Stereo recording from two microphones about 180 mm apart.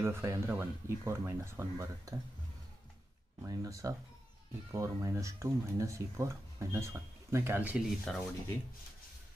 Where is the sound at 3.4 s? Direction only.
20° right (ahead or behind).